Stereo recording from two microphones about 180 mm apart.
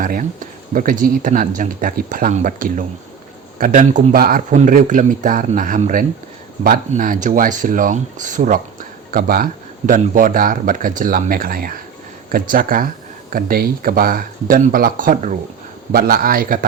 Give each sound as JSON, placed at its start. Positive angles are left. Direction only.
{"t": 0.0, "sound": "speech", "side_deg": -50}